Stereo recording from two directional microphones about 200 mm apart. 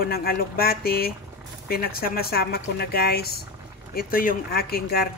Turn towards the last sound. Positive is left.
turn(degrees=50)  # may be behind; listen again after turning